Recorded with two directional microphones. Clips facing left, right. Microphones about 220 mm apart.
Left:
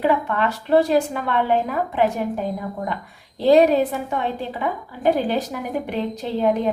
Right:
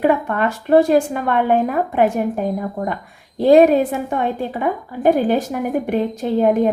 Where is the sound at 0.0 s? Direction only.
50° right (ahead or behind).